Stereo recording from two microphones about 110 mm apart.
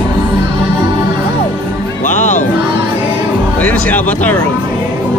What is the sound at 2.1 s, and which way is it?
Music, 90° left.